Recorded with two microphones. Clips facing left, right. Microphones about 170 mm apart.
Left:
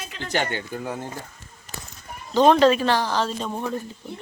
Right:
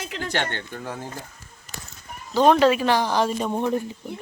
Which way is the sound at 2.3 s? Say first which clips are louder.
Left 1 dB; 10° right (ahead or behind).